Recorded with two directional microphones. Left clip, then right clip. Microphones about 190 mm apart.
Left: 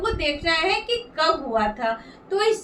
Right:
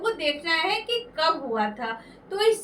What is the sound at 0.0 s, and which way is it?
A woman's voice, 15° left (ahead or behind).